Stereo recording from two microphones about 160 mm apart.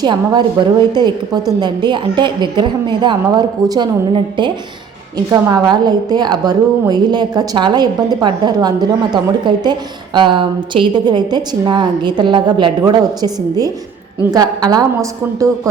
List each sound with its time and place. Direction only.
0.0 s a woman's voice: 25° right (ahead or behind)